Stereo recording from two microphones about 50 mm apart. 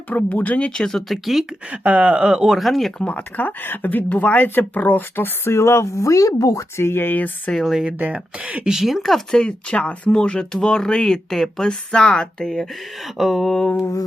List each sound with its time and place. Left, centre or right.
0.1 s speech: left
0.8 s speech: centre
1.7 s speech: right; by 2.6 s centre
2.6 s speech: centre
3.0 s speech: left
5.5 s speech: left
6.9 s speech: left
7.6 s speech: centre
7.9 s speech: right
8.6 s speech: centre
9.0 s speech: centre
9.4 s speech: left; by 11.7 s centre
11.7 s speech: centre
13.1 s speech: centre